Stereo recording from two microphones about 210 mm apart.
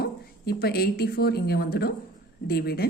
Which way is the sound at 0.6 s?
50° left (ahead or behind).